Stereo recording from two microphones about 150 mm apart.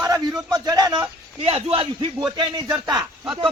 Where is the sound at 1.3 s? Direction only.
40° right (ahead or behind); by 3.0 s 25° right (ahead or behind).